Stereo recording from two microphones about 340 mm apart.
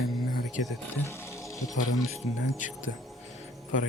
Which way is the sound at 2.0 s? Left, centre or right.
Centre.